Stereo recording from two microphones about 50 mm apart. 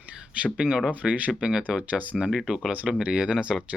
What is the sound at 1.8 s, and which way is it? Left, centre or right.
Speech, right.